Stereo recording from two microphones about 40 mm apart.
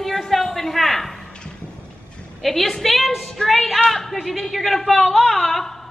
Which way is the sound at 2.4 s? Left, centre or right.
Centre.